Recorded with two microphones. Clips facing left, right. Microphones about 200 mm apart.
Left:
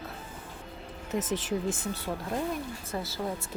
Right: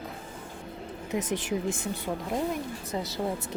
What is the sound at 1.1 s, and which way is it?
Speech, 15° right (ahead or behind).